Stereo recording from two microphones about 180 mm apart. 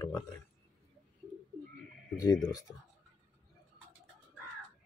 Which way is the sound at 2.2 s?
20° left (ahead or behind).